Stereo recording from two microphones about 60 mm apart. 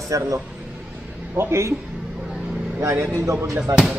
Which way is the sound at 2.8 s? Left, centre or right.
Right.